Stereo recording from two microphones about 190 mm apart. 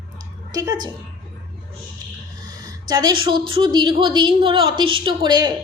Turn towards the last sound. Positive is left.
turn(degrees=-20)  # may be behind; listen again after turning